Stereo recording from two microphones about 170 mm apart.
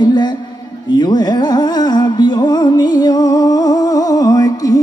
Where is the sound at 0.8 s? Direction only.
25° left (ahead or behind).